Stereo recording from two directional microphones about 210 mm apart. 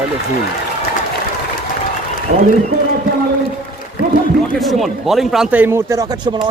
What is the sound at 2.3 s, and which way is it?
Speech, 50° right (ahead or behind).